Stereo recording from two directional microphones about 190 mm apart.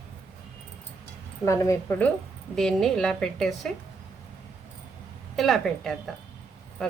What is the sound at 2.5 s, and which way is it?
A woman's voice, centre (ahead or behind).